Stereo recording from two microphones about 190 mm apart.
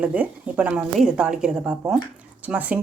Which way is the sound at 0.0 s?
5° right (ahead or behind).